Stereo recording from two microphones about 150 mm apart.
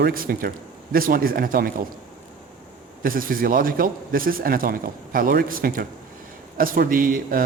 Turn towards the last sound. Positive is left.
turn(degrees=-65)  # may be behind; listen again after turning